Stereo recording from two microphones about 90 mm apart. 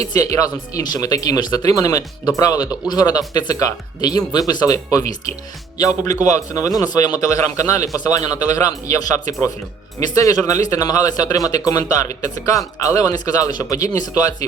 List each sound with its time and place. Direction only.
0.0 s a man's voice: 40° left (ahead or behind)
7.2 s a man's voice: 35° left (ahead or behind)